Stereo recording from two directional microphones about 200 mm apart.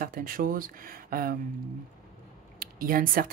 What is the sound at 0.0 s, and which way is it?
Speech, 45° right (ahead or behind).